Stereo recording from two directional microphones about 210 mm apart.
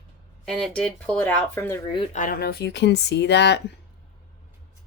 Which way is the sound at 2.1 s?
40° left (ahead or behind).